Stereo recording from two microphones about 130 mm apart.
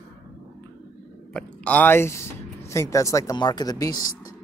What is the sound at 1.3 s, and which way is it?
Speech, 10° left (ahead or behind).